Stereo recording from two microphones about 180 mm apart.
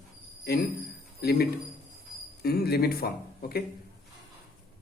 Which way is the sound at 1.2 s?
65° left (ahead or behind).